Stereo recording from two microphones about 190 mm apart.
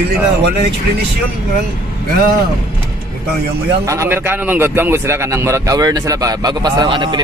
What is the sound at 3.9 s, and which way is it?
A man's voice, 15° right (ahead or behind).